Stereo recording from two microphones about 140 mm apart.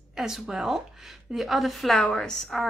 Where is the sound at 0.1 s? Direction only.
Centre (ahead or behind).